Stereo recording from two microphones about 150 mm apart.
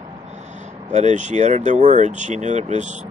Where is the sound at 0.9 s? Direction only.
50° right (ahead or behind).